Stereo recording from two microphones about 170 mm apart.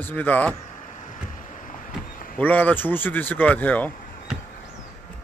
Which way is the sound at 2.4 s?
10° left (ahead or behind).